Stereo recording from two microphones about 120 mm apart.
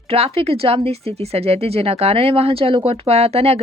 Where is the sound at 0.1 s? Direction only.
55° right (ahead or behind).